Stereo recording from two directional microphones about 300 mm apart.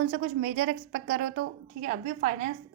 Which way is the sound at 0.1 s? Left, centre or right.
Right.